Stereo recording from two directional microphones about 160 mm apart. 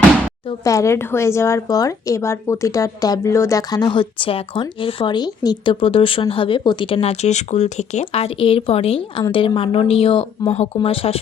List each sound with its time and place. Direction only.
0.6 s a woman's voice: 20° left (ahead or behind); by 9.2 s 40° left (ahead or behind)
9.2 s a woman's voice: 25° left (ahead or behind)